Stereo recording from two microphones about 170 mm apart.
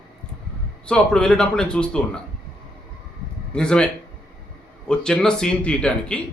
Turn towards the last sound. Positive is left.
turn(degrees=5)  # may be behind; listen again after turning